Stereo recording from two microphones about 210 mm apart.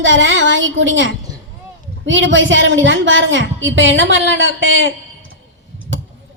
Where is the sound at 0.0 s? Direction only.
65° right (ahead or behind).